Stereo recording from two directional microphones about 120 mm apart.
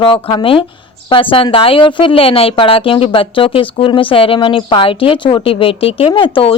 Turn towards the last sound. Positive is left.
turn(degrees=45)  # may be behind; listen again after turning